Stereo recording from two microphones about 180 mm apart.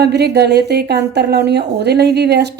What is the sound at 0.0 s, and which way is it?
A woman's voice, 65° right (ahead or behind).